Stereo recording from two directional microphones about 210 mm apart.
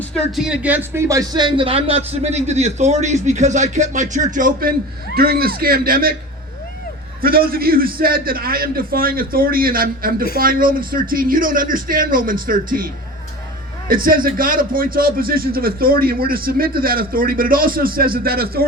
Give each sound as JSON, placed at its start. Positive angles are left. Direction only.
{"t": 0.1, "sound": "a man's voice", "side_deg": 0}
{"t": 7.2, "sound": "a man's voice", "side_deg": -45}
{"t": 13.8, "sound": "a man's voice", "side_deg": -40}